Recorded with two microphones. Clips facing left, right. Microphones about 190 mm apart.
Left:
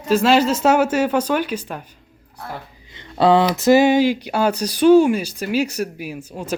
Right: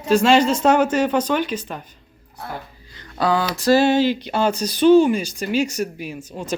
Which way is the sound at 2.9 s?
25° left (ahead or behind).